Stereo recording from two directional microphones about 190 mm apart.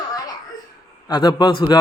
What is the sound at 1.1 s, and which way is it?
Speech, 25° left (ahead or behind).